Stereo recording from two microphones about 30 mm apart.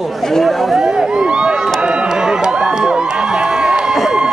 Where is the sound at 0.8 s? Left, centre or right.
Centre.